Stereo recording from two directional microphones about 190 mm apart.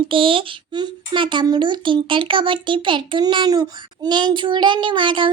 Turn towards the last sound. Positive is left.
turn(degrees=-25)  # may be behind; listen again after turning